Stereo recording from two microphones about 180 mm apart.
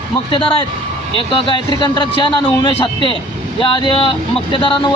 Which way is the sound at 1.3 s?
30° left (ahead or behind).